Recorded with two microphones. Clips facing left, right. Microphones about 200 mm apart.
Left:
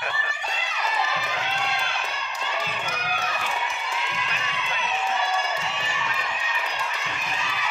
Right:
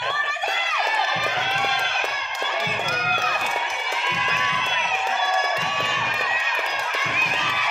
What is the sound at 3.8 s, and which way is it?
Crowd, 75° right (ahead or behind).